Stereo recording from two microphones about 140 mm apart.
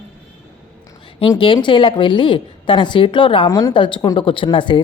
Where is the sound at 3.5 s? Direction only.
25° left (ahead or behind).